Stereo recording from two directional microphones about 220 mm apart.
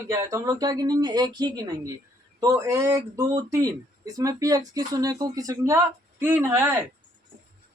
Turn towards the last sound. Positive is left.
turn(degrees=-10)  # may be behind; listen again after turning